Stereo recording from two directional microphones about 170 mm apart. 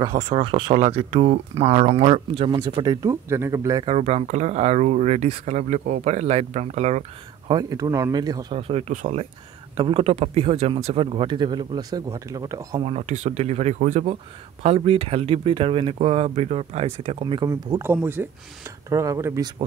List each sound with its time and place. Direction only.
0.3 s speech: 30° right (ahead or behind)
3.8 s speech: 40° right (ahead or behind)
7.5 s speech: 20° right (ahead or behind); by 9.3 s 45° right (ahead or behind)
9.8 s speech: 30° right (ahead or behind)
12.8 s speech: 40° right (ahead or behind)
17.5 s speech: 20° right (ahead or behind)